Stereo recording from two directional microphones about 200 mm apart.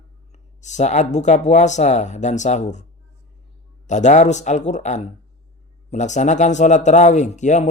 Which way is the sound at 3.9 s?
35° left (ahead or behind).